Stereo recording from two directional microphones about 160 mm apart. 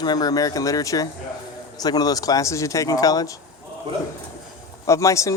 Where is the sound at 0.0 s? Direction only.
25° left (ahead or behind).